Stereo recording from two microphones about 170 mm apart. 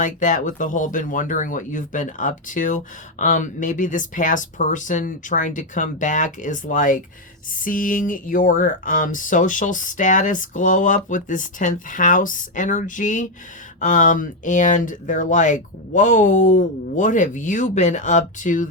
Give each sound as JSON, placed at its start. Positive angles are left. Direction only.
{"t": 0.0, "sound": "speech", "side_deg": 50}